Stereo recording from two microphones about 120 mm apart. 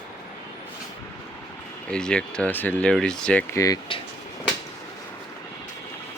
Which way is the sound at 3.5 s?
30° left (ahead or behind).